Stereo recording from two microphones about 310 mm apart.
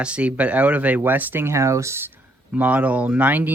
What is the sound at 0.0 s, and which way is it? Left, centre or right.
Speech, centre.